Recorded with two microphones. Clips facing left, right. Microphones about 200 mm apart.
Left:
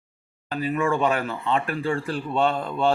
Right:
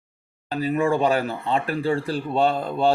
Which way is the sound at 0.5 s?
35° right (ahead or behind).